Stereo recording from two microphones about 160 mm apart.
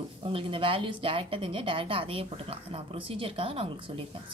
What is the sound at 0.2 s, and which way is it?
Speech, 35° right (ahead or behind).